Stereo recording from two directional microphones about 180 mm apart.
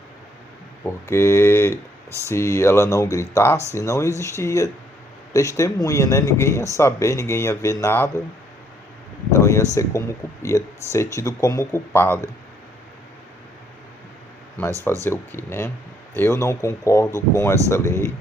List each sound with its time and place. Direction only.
0.9 s speech: 15° left (ahead or behind)
2.0 s speech: 15° right (ahead or behind)
2.3 s speech: 15° left (ahead or behind)
9.3 s speech: 15° left (ahead or behind)
15.0 s speech: 15° left (ahead or behind)